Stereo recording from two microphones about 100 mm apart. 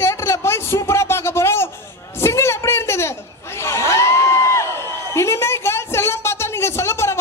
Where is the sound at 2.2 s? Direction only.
25° left (ahead or behind).